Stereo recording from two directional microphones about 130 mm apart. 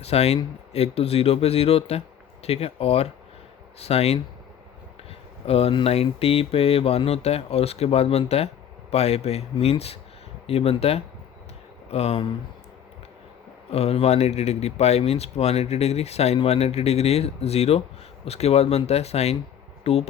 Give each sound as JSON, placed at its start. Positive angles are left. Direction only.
{"t": 0.0, "sound": "speech", "side_deg": 55}
{"t": 5.5, "sound": "speech", "side_deg": 50}
{"t": 13.7, "sound": "speech", "side_deg": 50}